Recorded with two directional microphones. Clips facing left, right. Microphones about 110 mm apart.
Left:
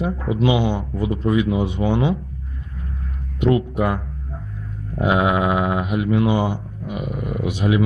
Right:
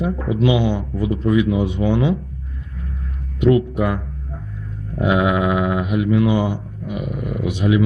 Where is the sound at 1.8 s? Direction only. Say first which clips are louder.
Right 1 dB; 25° left (ahead or behind).